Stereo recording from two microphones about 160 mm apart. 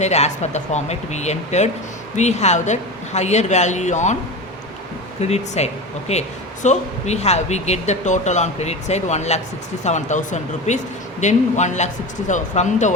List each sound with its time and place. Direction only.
0.0 s speech: 45° left (ahead or behind)
5.2 s speech: 45° left (ahead or behind)